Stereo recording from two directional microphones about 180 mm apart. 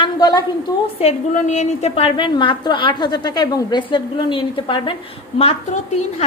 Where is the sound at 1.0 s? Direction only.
40° left (ahead or behind).